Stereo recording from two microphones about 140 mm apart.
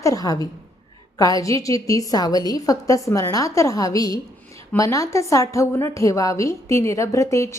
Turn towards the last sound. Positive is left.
turn(degrees=20)  # may be behind; listen again after turning